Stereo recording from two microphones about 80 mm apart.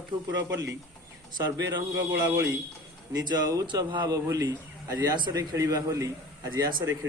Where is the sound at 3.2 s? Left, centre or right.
Right.